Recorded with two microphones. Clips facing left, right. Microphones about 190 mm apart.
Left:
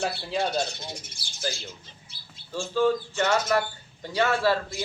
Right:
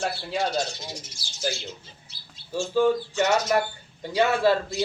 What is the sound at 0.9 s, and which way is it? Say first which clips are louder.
Speech: right 1 dB; 55° left (ahead or behind).